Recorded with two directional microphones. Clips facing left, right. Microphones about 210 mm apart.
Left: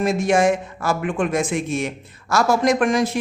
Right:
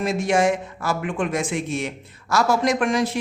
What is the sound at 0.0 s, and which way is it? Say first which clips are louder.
A woman's voice: left 2 dB; 45° left (ahead or behind).